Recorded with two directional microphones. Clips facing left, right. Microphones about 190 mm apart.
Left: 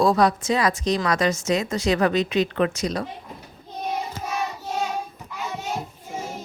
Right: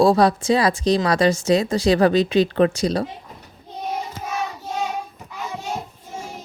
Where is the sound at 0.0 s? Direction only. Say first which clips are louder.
Right 3 dB; 30° right (ahead or behind).